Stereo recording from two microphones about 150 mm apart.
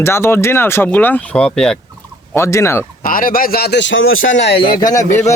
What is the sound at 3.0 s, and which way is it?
Speech, 70° left (ahead or behind).